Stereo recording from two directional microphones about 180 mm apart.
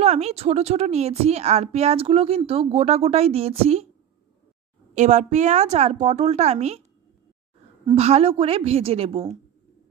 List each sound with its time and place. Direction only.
0.0 s a woman's voice: 35° right (ahead or behind)
4.9 s a woman's voice: 40° right (ahead or behind)
7.9 s a woman's voice: 35° right (ahead or behind)